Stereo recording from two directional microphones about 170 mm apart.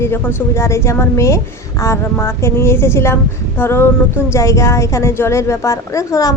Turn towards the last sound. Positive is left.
turn(degrees=20)  # may be behind; listen again after turning